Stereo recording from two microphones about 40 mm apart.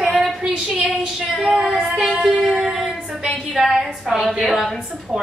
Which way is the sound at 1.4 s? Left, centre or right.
Centre.